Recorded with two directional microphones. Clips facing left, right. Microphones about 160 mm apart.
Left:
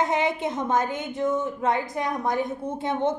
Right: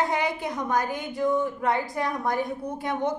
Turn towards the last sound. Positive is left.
turn(degrees=25)  # may be behind; listen again after turning